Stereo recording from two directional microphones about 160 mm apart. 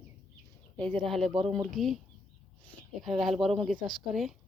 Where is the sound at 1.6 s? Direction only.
Centre (ahead or behind).